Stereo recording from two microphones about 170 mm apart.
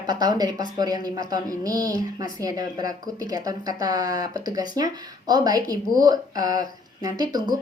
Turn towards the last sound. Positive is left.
turn(degrees=-25)  # may be behind; listen again after turning